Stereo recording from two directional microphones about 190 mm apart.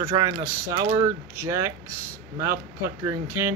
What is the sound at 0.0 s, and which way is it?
Speech, 20° right (ahead or behind).